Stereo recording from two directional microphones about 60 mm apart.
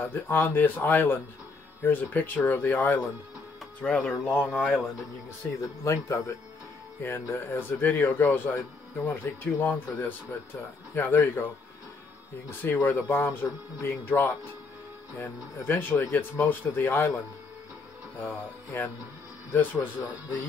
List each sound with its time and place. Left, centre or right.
0.0 s speech: left
3.8 s speech: centre
4.3 s speech: left
5.6 s speech: left
7.0 s speech: left
12.4 s speech: left
15.6 s speech: left
18.2 s speech: left